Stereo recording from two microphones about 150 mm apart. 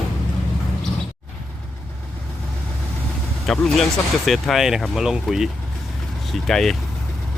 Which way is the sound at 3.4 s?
Centre (ahead or behind).